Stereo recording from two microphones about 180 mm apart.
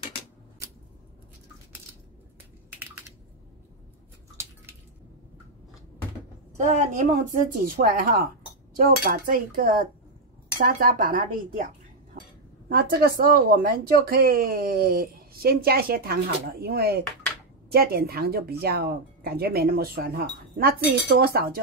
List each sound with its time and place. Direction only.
6.5 s a woman's voice: 40° right (ahead or behind)
12.2 s chink: 55° right (ahead or behind)
13.2 s speech: 55° right (ahead or behind)